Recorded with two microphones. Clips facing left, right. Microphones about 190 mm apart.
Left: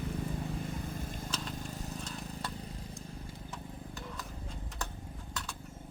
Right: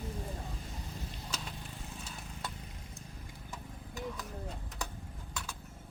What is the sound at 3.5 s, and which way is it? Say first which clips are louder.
Stir: right 2 dB; centre (ahead or behind).